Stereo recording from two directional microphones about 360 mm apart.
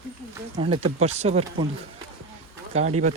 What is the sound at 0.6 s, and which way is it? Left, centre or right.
Speech, centre.